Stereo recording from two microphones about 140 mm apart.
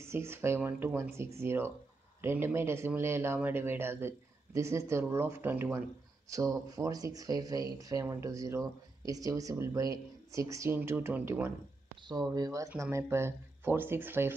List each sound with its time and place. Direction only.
0.0 s speech: 20° right (ahead or behind)
12.1 s speech: 30° right (ahead or behind)